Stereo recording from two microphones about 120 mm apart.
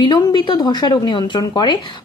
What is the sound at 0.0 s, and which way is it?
A woman's voice, 40° left (ahead or behind).